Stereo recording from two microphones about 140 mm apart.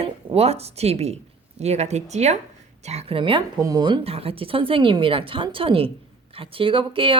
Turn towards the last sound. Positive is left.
turn(degrees=-40)  # may be behind; listen again after turning